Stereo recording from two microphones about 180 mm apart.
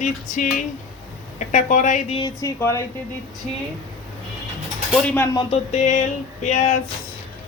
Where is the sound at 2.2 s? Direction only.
20° left (ahead or behind).